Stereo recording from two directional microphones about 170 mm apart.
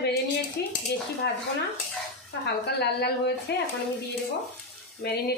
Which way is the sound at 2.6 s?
75° left (ahead or behind).